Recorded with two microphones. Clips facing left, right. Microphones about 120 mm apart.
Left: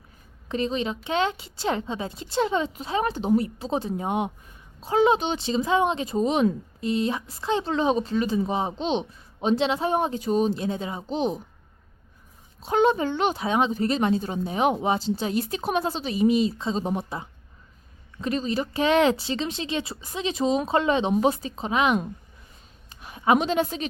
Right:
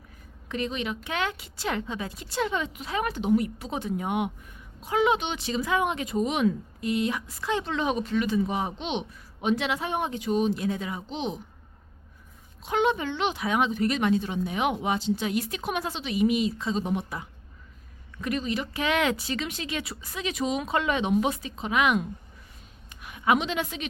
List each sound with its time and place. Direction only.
0.4 s a woman's voice: 30° left (ahead or behind)
11.2 s a woman's voice: 40° left (ahead or behind)
12.6 s a woman's voice: 40° left (ahead or behind)
13.4 s a woman's voice: 30° left (ahead or behind)
22.9 s a sound: 30° left (ahead or behind)